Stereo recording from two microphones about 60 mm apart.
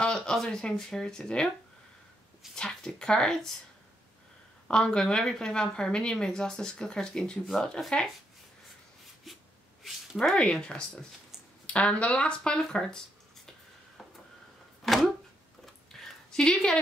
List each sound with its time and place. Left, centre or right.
0.0 s speech: centre
2.5 s a woman's voice: centre
4.6 s a woman's voice: centre
9.8 s a sound: centre
10.3 s a woman's voice: centre
14.8 s a sound: centre